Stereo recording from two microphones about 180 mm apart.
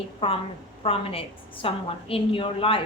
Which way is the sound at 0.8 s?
30° left (ahead or behind).